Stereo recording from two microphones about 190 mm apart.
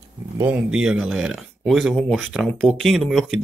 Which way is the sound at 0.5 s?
5° right (ahead or behind).